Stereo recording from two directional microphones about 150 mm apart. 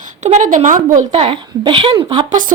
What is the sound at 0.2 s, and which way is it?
Speech, 50° right (ahead or behind).